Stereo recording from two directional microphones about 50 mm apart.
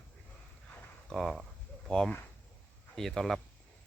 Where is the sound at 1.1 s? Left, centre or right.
Centre.